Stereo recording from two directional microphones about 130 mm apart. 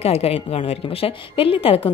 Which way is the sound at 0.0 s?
50° left (ahead or behind).